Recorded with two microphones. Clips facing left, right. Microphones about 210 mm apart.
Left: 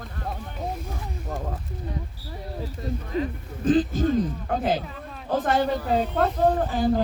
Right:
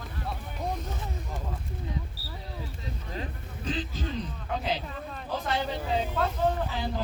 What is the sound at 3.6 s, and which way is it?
Speech, 50° left (ahead or behind).